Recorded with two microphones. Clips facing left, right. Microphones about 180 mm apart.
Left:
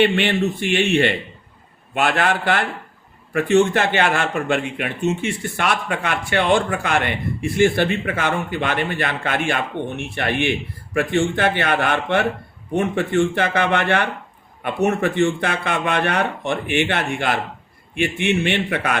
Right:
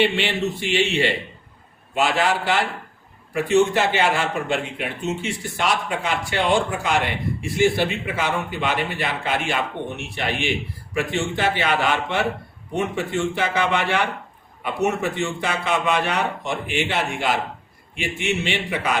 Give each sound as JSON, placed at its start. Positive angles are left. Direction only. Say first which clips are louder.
{"t": 0.0, "sound": "a man's voice", "louder": "left 4 dB", "side_deg": 55}